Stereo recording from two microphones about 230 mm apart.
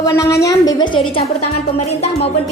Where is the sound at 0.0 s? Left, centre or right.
Centre.